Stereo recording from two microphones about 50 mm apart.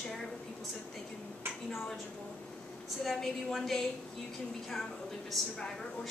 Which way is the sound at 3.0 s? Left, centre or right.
Centre.